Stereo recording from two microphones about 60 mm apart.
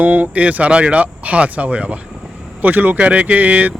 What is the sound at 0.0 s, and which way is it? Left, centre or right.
Speech, right.